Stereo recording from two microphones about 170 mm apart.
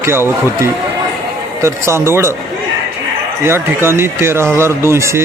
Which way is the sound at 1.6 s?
15° right (ahead or behind).